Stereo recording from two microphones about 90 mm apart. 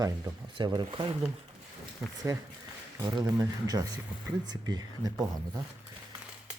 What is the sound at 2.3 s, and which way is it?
Speech, 35° right (ahead or behind).